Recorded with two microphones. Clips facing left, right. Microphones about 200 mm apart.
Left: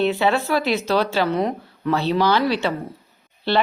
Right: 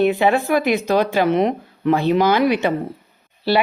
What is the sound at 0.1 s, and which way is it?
A woman's voice, 15° right (ahead or behind).